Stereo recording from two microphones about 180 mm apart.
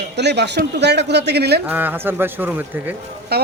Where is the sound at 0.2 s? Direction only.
70° right (ahead or behind).